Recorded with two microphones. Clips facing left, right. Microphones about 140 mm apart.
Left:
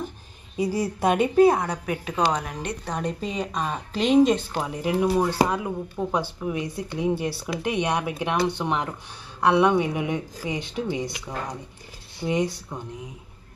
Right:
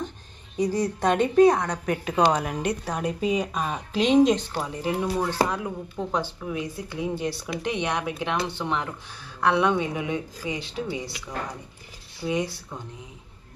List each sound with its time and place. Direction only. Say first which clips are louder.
0.6 s a woman's voice: even; 10° left (ahead or behind)